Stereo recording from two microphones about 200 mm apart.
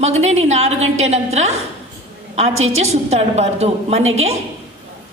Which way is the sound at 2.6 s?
30° right (ahead or behind).